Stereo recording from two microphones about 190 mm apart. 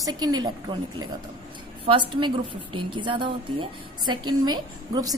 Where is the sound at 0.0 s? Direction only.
20° right (ahead or behind).